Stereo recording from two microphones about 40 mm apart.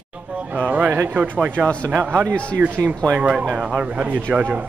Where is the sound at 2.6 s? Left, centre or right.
Right.